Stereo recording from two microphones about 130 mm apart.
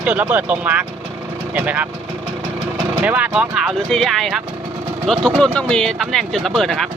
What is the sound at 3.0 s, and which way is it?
Speech, 10° right (ahead or behind).